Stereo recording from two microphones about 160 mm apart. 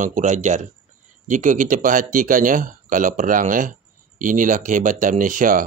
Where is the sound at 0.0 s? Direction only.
50° right (ahead or behind).